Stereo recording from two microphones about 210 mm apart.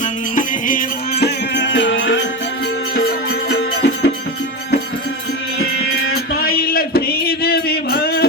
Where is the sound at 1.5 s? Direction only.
60° left (ahead or behind).